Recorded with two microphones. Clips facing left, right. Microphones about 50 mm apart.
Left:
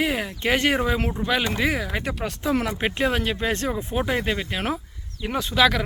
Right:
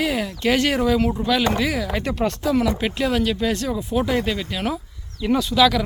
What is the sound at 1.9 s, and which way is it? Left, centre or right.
Speech, centre.